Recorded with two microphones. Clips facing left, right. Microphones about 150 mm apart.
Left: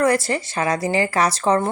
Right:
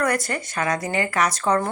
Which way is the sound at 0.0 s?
25° left (ahead or behind).